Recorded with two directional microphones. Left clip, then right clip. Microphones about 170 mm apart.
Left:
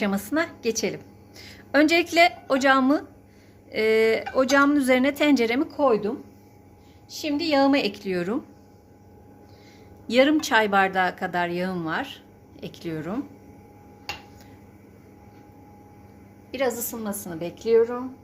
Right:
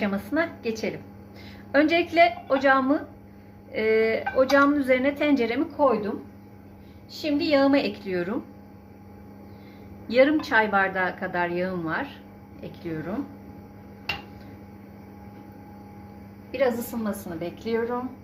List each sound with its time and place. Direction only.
0.0 s a woman's voice: 90° left
7.2 s speech: 80° left
10.1 s a woman's voice: 90° left
16.5 s a woman's voice: 90° left